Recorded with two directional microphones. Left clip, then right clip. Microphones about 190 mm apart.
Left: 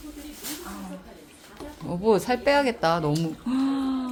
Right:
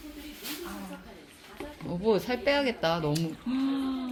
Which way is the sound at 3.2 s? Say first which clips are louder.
Left 4 dB; 10° left (ahead or behind).